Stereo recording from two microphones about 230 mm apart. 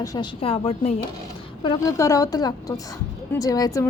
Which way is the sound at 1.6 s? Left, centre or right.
Centre.